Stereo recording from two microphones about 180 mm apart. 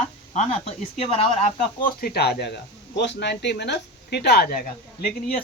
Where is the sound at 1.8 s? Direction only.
60° left (ahead or behind).